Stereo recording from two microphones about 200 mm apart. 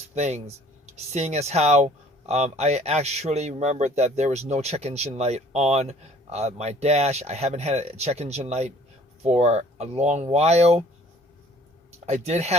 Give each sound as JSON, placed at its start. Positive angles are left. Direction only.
{"t": 0.1, "sound": "speech", "side_deg": -35}
{"t": 12.0, "sound": "speech", "side_deg": -35}